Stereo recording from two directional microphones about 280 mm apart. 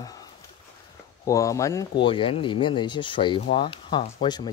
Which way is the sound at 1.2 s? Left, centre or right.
Centre.